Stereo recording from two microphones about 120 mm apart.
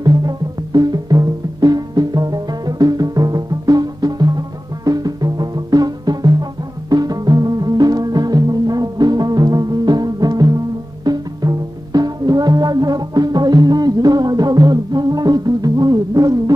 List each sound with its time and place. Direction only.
0.0 s music: 35° right (ahead or behind)